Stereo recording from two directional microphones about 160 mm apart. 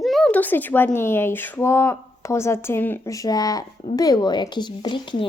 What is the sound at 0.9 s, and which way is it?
A woman's voice, 15° left (ahead or behind).